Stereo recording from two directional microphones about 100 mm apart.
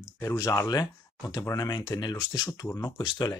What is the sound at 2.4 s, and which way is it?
Speech, 30° left (ahead or behind).